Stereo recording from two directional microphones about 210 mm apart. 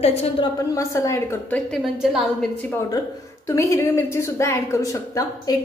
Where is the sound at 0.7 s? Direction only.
15° left (ahead or behind).